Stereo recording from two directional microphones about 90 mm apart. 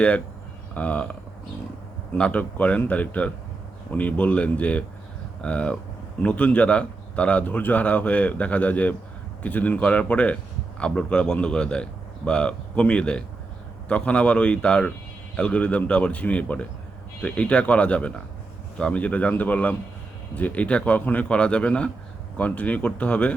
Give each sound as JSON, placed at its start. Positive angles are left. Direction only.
{"t": 0.7, "sound": "speech", "side_deg": 15}
{"t": 2.1, "sound": "speech", "side_deg": 15}